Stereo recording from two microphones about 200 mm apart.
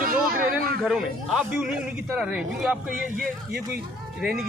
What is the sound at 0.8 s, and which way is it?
Speech, centre (ahead or behind).